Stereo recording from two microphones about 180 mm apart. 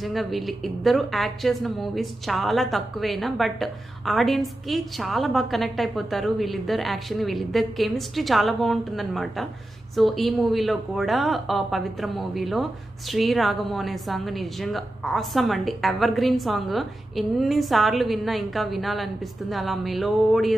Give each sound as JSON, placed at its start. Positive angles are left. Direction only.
{"t": 0.0, "sound": "a woman's voice", "side_deg": 0}